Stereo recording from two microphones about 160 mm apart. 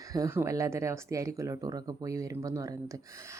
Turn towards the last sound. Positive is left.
turn(degrees=-20)  # may be behind; listen again after turning